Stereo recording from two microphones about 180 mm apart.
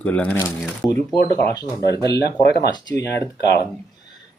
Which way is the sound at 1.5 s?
20° left (ahead or behind).